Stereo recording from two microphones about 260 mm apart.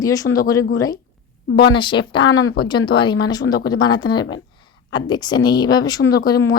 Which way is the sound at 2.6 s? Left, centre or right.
Centre.